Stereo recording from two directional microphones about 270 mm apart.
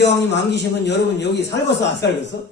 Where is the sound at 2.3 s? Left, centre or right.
Left.